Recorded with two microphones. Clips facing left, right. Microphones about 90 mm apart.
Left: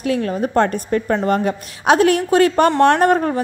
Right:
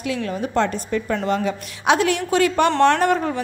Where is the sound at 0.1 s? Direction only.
45° left (ahead or behind).